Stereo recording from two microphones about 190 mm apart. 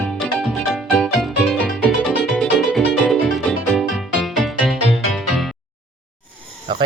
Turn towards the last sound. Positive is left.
turn(degrees=-25)  # may be behind; listen again after turning